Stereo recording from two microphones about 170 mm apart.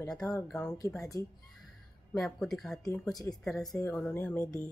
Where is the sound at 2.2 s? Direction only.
Centre (ahead or behind).